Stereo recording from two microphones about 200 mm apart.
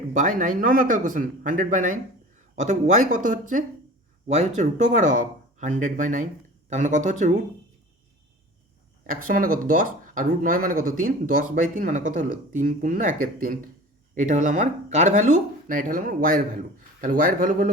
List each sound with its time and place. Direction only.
0.1 s speech: 40° right (ahead or behind)
9.0 s speech: 45° right (ahead or behind)